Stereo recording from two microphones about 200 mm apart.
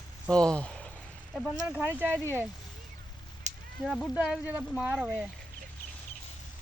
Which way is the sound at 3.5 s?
35° right (ahead or behind).